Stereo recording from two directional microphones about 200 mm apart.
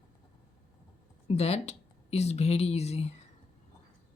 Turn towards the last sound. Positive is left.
turn(degrees=30)  # may be behind; listen again after turning